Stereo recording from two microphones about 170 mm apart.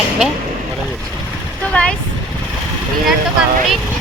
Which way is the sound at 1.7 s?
5° left (ahead or behind).